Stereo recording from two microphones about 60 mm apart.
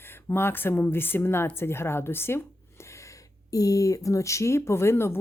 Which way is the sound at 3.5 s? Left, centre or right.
Left.